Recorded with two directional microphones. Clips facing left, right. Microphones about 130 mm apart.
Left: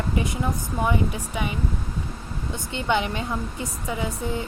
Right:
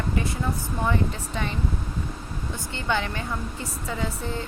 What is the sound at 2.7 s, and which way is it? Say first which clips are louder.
A woman's voice: left 3 dB; 20° left (ahead or behind).